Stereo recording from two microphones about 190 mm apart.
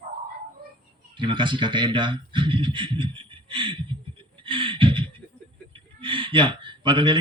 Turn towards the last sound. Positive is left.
turn(degrees=-25)  # may be behind; listen again after turning